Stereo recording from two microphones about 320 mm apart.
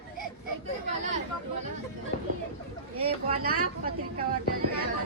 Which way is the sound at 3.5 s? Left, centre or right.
Right.